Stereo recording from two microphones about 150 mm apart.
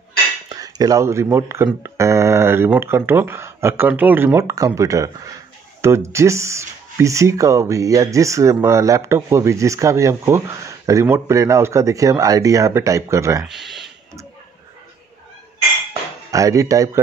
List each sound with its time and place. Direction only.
0.5 s speech: 25° right (ahead or behind)
13.4 s a sound: 5° right (ahead or behind)
15.9 s dishes: 20° right (ahead or behind)